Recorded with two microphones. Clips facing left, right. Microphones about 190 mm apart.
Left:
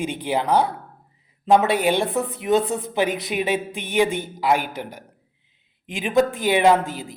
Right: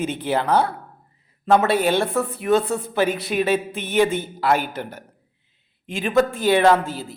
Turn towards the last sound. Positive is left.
turn(degrees=15)  # may be behind; listen again after turning